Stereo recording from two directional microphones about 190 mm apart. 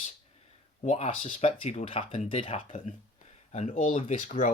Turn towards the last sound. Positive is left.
turn(degrees=45)  # may be behind; listen again after turning